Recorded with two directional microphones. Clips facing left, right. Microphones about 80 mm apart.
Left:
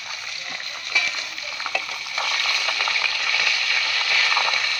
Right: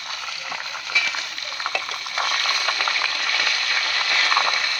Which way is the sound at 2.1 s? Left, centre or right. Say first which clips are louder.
Right 2 dB; right.